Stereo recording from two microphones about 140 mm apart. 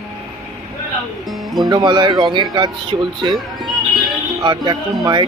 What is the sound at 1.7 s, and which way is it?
Speech, 30° right (ahead or behind).